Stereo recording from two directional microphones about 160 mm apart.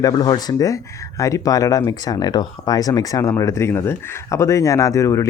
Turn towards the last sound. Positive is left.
turn(degrees=20)  # may be behind; listen again after turning